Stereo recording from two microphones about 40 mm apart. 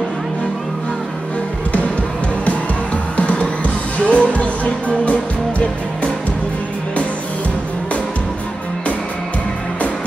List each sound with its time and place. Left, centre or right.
4.0 s music: left